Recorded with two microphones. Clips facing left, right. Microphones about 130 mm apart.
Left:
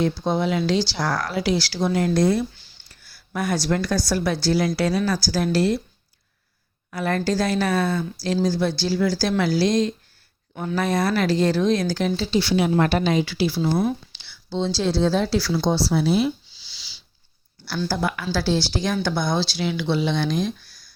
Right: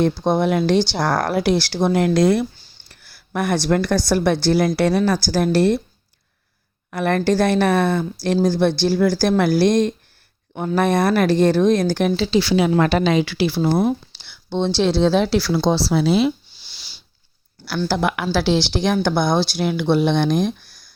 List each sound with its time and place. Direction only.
0.2 s speech: 55° right (ahead or behind); by 2.5 s 85° right
2.9 s speech: 60° right (ahead or behind)
6.9 s speech: 60° right (ahead or behind); by 16.3 s 90° right
16.5 s a sound: 55° right (ahead or behind)
17.7 s speech: 80° right; by 20.9 s 50° right (ahead or behind)